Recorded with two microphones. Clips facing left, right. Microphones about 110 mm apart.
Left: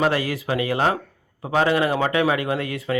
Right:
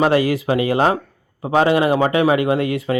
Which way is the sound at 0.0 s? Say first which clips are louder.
Right 6 dB; 20° right (ahead or behind).